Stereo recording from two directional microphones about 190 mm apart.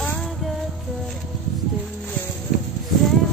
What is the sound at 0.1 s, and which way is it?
Music, centre (ahead or behind).